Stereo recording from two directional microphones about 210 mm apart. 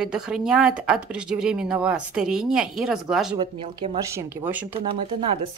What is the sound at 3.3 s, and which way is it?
Speech, 20° right (ahead or behind).